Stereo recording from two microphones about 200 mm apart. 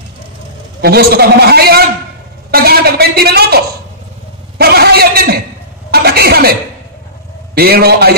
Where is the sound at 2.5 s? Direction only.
50° right (ahead or behind).